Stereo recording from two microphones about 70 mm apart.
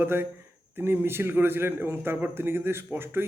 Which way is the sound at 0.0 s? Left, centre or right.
Right.